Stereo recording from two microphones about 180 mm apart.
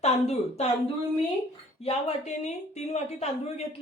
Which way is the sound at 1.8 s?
35° left (ahead or behind).